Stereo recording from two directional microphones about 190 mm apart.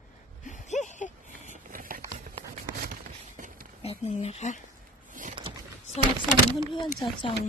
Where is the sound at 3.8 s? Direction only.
35° left (ahead or behind).